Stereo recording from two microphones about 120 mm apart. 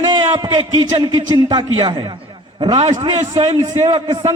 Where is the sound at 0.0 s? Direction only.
40° right (ahead or behind).